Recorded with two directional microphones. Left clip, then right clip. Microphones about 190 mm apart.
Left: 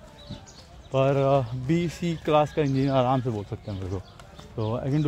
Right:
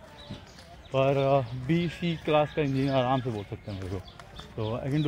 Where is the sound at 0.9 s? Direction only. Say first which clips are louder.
Left 2 dB; 20° left (ahead or behind).